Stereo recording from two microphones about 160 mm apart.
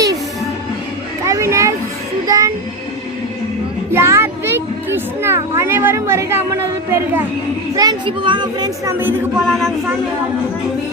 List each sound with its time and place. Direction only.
1.2 s children playing: 20° right (ahead or behind)
2.2 s child singing: 20° right (ahead or behind)
3.9 s music: 15° right (ahead or behind)
7.8 s speech: 30° right (ahead or behind)
9.5 s speech: centre (ahead or behind)